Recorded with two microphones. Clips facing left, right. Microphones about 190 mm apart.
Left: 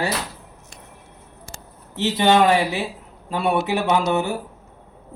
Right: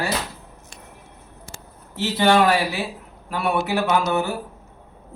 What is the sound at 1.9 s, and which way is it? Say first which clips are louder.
A man's voice: left 1 dB; 20° left (ahead or behind).